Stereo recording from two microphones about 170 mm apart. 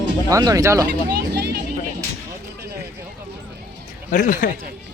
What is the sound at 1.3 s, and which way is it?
Vehicle, 70° right (ahead or behind).